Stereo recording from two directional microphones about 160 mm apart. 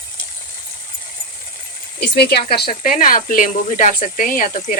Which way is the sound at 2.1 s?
90° left.